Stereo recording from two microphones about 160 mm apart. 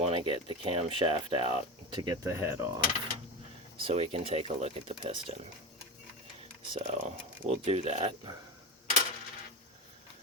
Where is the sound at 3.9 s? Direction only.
35° right (ahead or behind).